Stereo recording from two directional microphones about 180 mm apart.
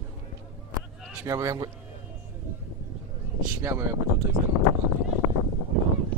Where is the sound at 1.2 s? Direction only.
20° right (ahead or behind).